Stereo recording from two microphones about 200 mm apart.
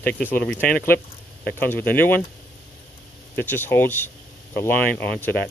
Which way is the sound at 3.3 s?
10° left (ahead or behind).